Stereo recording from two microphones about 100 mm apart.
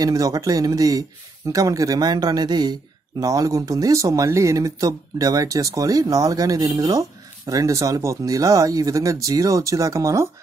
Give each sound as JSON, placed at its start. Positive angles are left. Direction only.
{"t": 0.0, "sound": "speech", "side_deg": -40}